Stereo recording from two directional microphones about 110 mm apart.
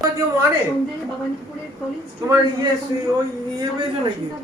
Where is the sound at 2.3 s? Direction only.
25° right (ahead or behind).